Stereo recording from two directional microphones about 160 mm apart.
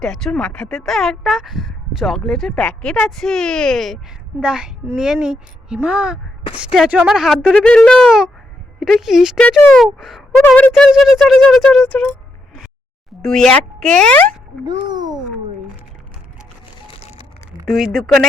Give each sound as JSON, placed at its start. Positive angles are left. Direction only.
{"t": 0.0, "sound": "speech", "side_deg": 5}
{"t": 13.2, "sound": "speech", "side_deg": 5}
{"t": 14.6, "sound": "a sound", "side_deg": -25}
{"t": 16.9, "sound": "music", "side_deg": 40}
{"t": 17.7, "sound": "speech", "side_deg": 0}